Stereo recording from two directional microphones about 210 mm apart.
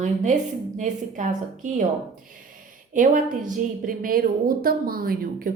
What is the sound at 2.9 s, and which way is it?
A woman's voice, 40° right (ahead or behind).